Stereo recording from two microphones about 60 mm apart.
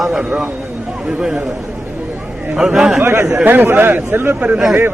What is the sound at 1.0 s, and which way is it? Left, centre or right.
Speech, right.